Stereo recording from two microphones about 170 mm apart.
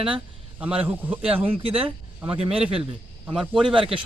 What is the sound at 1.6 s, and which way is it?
Speech, 35° right (ahead or behind).